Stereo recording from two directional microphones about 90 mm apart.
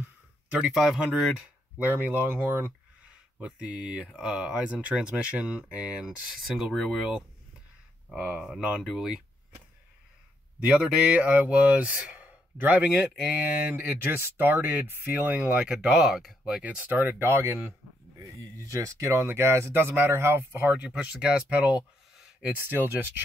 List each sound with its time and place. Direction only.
0.5 s speech: 15° right (ahead or behind)
0.7 s speech: 5° right (ahead or behind)
2.2 s speech: 25° right (ahead or behind)
3.1 s speech: 10° right (ahead or behind)
8.1 s speech: 10° right (ahead or behind)
10.6 s speech: 15° right (ahead or behind)
16.6 s speech: 20° right (ahead or behind)
22.1 s a sound: 5° right (ahead or behind)
22.5 s speech: 20° right (ahead or behind)